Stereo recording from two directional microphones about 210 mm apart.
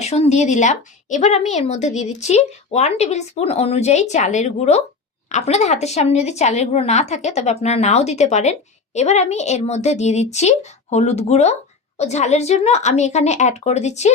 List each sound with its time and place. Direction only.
0.0 s a woman's voice: 30° left (ahead or behind)